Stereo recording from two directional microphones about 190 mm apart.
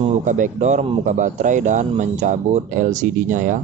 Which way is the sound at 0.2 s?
40° right (ahead or behind).